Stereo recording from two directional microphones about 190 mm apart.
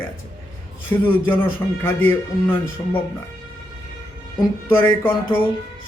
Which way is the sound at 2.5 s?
30° left (ahead or behind).